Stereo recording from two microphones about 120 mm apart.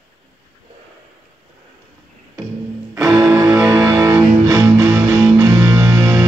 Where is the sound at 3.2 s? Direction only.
30° right (ahead or behind).